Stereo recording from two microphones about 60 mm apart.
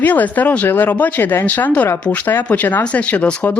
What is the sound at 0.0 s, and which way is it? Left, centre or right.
Speech, left.